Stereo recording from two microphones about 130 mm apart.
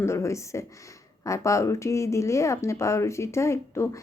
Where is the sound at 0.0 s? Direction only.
20° left (ahead or behind).